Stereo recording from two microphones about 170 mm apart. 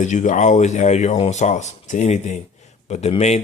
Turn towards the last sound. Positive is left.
turn(degrees=40)  # may be behind; listen again after turning